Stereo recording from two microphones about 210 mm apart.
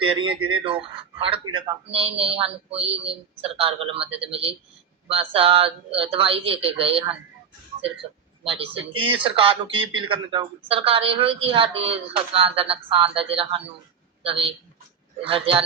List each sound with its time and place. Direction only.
0.0 s speech: 25° right (ahead or behind)
8.4 s a woman's voice: 25° right (ahead or behind)